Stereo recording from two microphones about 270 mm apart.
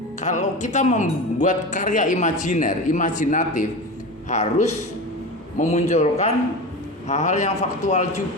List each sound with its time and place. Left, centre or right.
0.2 s speech: left